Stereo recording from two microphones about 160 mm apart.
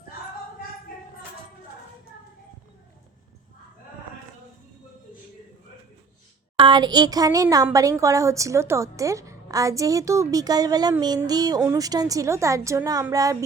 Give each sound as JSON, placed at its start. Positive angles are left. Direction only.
{"t": 6.6, "sound": "a woman's voice", "side_deg": -30}